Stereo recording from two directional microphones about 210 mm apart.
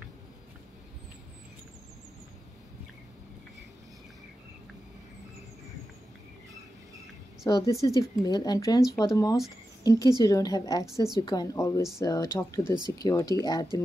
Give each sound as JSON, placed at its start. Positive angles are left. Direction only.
{"t": 7.4, "sound": "speech", "side_deg": 15}